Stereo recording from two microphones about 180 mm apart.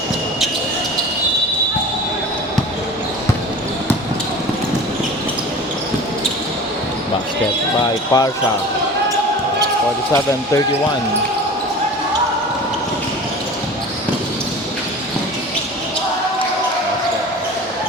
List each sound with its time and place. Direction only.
8.1 s speech: 25° left (ahead or behind)
10.1 s speech: 15° left (ahead or behind)